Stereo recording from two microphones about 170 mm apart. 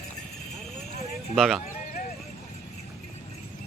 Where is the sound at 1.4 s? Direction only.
Centre (ahead or behind).